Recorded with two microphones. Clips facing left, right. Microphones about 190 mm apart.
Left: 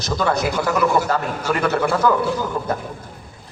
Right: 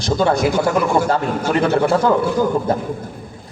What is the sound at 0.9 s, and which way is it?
Speech, 50° right (ahead or behind).